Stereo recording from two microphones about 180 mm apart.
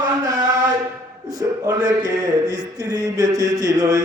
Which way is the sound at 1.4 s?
20° right (ahead or behind).